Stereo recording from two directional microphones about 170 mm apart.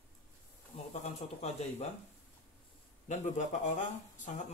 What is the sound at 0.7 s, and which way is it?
Speech, 40° left (ahead or behind).